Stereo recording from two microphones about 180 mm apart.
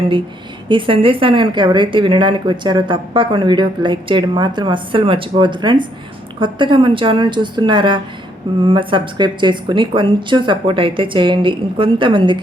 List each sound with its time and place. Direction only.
0.7 s a woman's voice: 30° right (ahead or behind)